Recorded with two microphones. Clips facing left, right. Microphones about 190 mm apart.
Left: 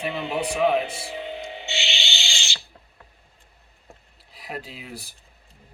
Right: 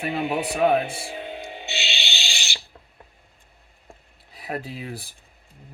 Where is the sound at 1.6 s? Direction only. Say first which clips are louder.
Left 1 dB; 15° left (ahead or behind).